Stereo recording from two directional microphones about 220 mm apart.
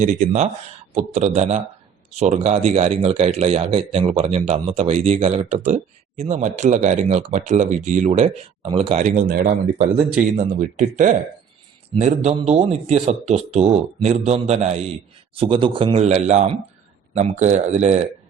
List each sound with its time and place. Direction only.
0.0 s speech: 35° right (ahead or behind)